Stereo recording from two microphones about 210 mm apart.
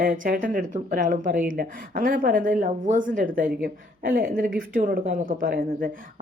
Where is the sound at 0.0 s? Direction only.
40° right (ahead or behind).